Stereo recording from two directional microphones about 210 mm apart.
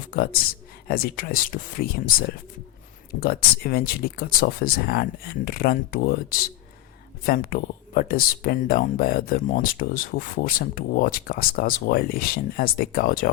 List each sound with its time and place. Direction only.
0.1 s speech: 45° left (ahead or behind)